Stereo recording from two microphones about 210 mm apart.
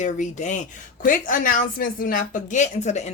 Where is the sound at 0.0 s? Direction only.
35° left (ahead or behind).